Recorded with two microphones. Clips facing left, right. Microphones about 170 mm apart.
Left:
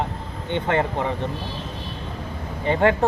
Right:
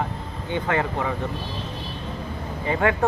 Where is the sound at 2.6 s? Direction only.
30° left (ahead or behind).